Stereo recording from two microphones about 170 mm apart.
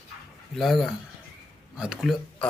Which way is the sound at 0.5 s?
Centre (ahead or behind).